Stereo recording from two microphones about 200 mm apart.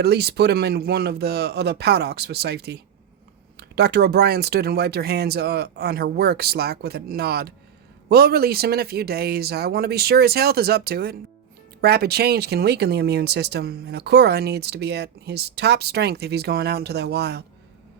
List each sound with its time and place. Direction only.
0.0 s speech: 55° right (ahead or behind)